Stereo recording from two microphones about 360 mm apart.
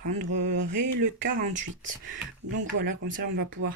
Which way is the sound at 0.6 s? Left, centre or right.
Right.